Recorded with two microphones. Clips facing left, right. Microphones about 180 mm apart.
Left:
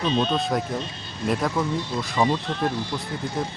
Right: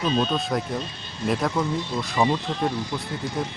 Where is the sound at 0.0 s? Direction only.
5° right (ahead or behind).